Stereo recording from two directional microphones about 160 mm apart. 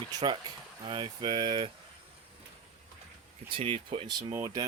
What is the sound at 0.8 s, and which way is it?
Speech, 30° right (ahead or behind).